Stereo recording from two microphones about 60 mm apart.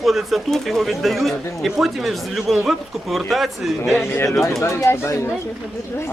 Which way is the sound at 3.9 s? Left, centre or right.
Left.